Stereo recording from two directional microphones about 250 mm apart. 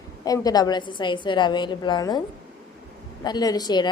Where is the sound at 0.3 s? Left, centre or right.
Centre.